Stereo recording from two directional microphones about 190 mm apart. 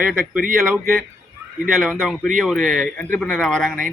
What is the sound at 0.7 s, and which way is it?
Speech, centre (ahead or behind).